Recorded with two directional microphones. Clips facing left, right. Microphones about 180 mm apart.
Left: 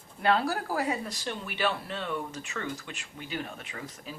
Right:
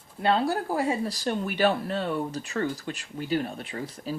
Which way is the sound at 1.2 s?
45° right (ahead or behind).